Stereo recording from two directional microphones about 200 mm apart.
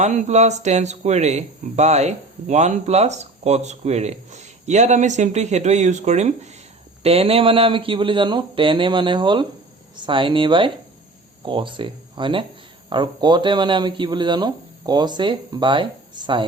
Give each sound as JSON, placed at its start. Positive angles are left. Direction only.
{"t": 0.0, "sound": "speech", "side_deg": -35}